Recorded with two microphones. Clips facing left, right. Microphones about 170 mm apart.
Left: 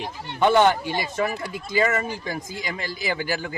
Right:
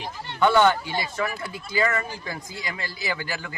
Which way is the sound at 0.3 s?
20° left (ahead or behind).